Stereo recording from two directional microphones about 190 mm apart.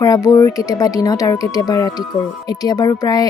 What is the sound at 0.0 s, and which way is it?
Speech, 20° left (ahead or behind).